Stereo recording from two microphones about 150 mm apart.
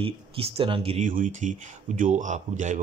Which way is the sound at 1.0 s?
60° right (ahead or behind).